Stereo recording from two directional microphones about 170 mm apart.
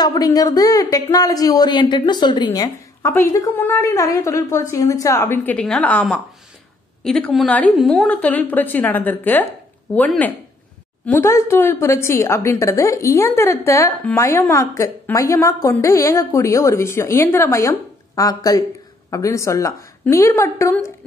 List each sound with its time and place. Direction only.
0.0 s a woman's voice: 20° left (ahead or behind)